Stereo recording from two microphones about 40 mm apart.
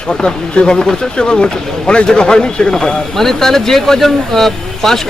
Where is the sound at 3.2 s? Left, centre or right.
Centre.